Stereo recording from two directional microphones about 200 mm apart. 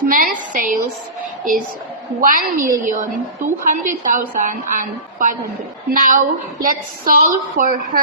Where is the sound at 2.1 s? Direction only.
45° right (ahead or behind).